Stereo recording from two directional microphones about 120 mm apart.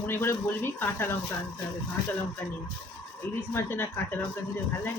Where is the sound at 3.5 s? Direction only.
20° left (ahead or behind).